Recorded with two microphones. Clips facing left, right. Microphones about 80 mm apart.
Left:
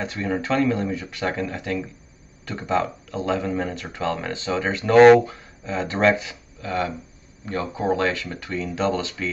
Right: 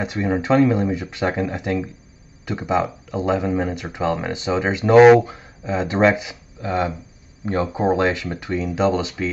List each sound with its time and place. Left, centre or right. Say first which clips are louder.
0.0 s speech: right 4 dB; centre